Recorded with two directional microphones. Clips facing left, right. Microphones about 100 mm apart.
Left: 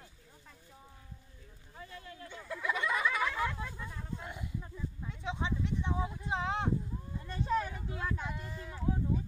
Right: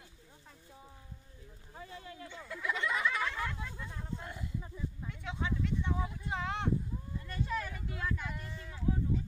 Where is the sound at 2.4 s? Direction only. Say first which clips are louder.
Left 2 dB; 5° left (ahead or behind).